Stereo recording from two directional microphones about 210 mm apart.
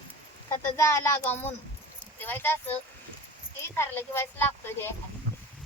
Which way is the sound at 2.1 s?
10° left (ahead or behind).